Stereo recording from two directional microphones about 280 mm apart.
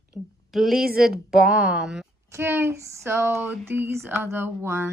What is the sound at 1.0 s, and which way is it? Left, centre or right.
A woman's voice, centre.